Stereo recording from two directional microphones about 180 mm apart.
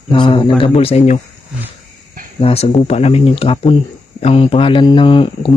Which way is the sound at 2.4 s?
35° left (ahead or behind).